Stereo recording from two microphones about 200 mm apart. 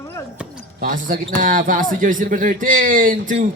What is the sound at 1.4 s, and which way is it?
Speech, 40° right (ahead or behind).